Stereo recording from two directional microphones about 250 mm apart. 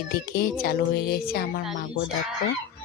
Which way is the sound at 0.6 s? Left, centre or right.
Left.